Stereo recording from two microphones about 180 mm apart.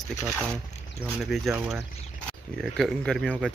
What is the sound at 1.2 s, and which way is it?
Speech, centre (ahead or behind).